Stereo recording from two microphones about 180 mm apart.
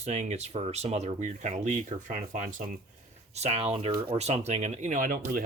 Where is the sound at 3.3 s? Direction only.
35° right (ahead or behind).